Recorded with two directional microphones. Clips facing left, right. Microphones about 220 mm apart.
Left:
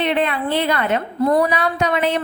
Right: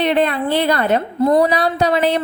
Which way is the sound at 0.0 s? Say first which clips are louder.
Right 3 dB; 40° right (ahead or behind).